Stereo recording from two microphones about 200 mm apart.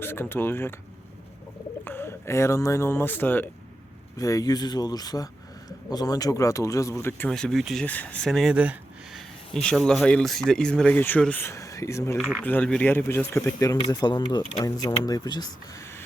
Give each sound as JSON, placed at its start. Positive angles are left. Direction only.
{"t": 0.0, "sound": "a man's voice", "side_deg": 10}
{"t": 1.8, "sound": "a man's voice", "side_deg": 10}
{"t": 12.1, "sound": "speech", "side_deg": -5}
{"t": 12.4, "sound": "a man's voice", "side_deg": 10}